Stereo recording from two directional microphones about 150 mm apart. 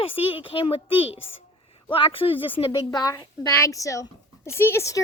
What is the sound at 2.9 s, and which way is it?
A woman's voice, 25° left (ahead or behind).